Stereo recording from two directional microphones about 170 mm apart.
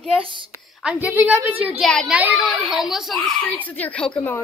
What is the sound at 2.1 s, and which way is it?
A child's voice, 10° right (ahead or behind).